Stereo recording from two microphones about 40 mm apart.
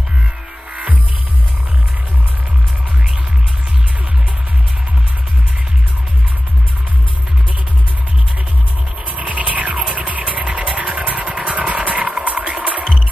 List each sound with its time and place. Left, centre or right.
9.2 s music: right